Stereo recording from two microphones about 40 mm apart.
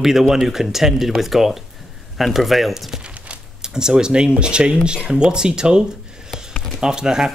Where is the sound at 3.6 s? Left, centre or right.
Centre.